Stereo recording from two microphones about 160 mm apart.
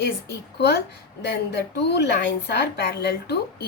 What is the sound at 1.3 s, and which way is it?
A woman's voice, 90° left.